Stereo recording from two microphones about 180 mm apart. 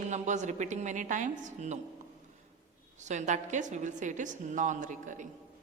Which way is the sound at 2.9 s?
40° right (ahead or behind).